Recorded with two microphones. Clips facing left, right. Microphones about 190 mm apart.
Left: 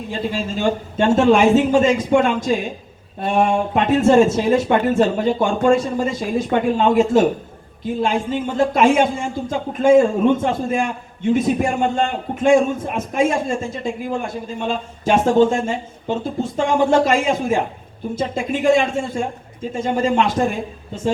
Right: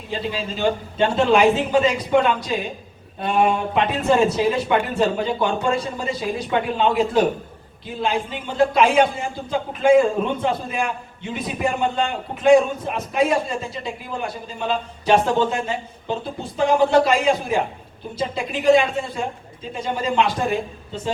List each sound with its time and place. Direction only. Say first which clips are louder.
0.1 s speech: left 2 dB; 45° left (ahead or behind)